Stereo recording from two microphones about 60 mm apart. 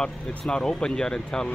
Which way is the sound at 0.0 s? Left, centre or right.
Centre.